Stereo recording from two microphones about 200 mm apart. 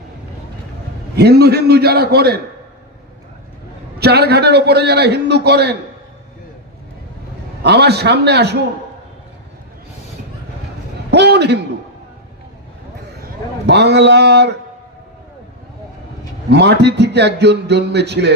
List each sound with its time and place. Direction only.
1.1 s a man's voice: 55° right (ahead or behind)
4.0 s a man's voice: 55° right (ahead or behind)
7.6 s a man's voice: 55° right (ahead or behind)
11.1 s a man's voice: 60° right (ahead or behind)
13.7 s a man's voice: 60° right (ahead or behind)
16.5 s a man's voice: 60° right (ahead or behind)